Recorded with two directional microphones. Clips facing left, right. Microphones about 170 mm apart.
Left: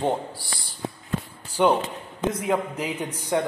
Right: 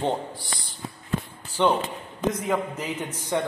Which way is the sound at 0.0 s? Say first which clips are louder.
Left 1 dB; 5° left (ahead or behind).